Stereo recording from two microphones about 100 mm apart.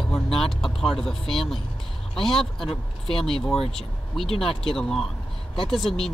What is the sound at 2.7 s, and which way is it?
Speech, 70° left (ahead or behind).